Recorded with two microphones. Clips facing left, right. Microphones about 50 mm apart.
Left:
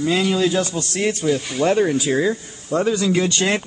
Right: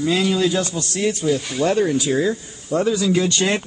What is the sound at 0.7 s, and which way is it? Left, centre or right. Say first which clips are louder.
Speech: even; left.